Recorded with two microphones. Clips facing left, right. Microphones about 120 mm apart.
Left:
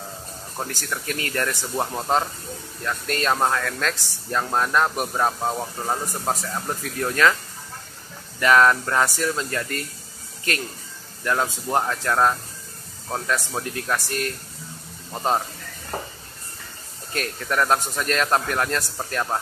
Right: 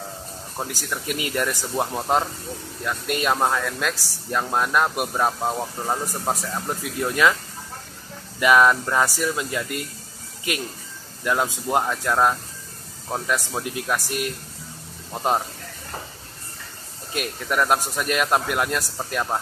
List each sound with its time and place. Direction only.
0.6 s speech: 5° right (ahead or behind)
8.4 s speech: 10° right (ahead or behind)
13.7 s speech: 15° right (ahead or behind)
17.1 s speech: 10° right (ahead or behind)